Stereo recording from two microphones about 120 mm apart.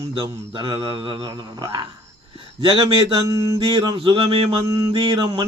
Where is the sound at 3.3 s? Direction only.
30° right (ahead or behind).